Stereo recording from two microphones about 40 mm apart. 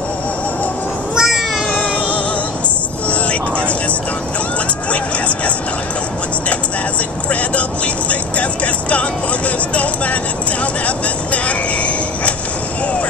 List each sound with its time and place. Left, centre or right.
1.1 s meow: centre
1.7 s cat: left
3.1 s vehicle: left
10.6 s train: left